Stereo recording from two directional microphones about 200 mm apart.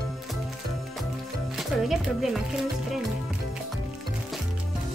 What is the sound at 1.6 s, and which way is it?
Speech, centre (ahead or behind).